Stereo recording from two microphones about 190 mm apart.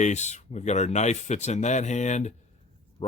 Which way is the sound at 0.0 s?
35° left (ahead or behind).